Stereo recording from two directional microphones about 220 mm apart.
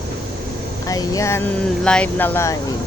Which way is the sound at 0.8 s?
15° left (ahead or behind).